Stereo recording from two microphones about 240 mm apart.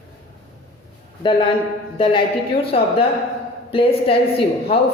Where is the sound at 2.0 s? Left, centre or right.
Centre.